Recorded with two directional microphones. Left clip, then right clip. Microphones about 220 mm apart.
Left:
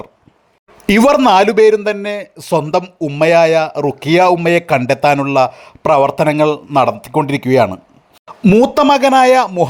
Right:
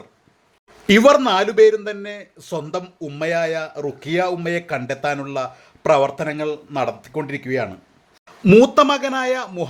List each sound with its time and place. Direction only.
0.9 s a man's voice: 35° left (ahead or behind)